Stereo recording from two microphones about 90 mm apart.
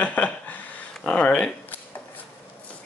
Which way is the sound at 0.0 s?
15° left (ahead or behind).